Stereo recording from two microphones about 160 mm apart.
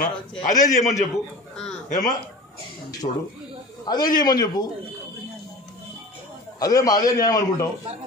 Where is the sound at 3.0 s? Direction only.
30° left (ahead or behind).